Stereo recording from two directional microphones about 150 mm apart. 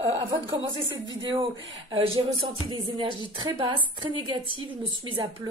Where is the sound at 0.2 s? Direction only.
30° right (ahead or behind).